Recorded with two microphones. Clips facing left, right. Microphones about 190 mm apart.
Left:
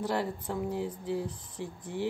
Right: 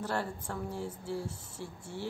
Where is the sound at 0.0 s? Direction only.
15° left (ahead or behind).